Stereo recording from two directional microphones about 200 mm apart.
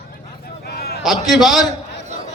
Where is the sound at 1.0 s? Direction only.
Centre (ahead or behind).